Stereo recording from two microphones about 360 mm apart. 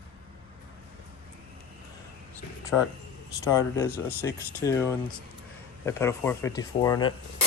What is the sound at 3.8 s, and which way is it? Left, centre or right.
Speech, centre.